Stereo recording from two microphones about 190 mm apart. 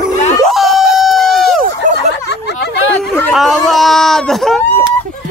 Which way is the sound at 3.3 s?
Centre (ahead or behind).